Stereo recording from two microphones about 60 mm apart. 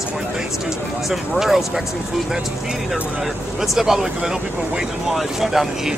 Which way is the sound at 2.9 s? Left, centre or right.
Centre.